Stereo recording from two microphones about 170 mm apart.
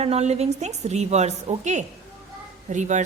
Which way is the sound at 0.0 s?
40° right (ahead or behind).